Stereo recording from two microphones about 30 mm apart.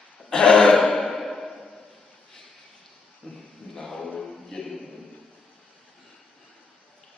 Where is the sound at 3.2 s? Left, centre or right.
Left.